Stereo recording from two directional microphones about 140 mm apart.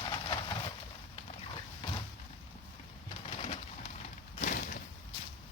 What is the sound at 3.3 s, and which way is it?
Bird, 45° left (ahead or behind).